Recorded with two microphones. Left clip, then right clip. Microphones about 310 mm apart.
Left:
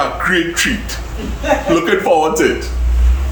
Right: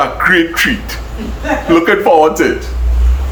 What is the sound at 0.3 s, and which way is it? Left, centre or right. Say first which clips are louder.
Speech: right 5 dB; centre.